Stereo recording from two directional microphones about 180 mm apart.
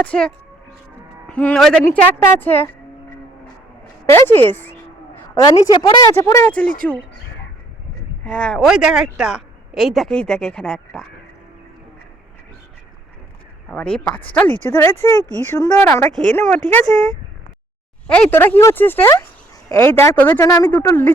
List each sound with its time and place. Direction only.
0.0 s speech: 5° left (ahead or behind)
1.3 s speech: 5° left (ahead or behind)
4.0 s a woman's voice: 15° left (ahead or behind)
8.2 s speech: 5° left (ahead or behind)
13.7 s speech: 5° left (ahead or behind)
18.1 s speech: 10° left (ahead or behind)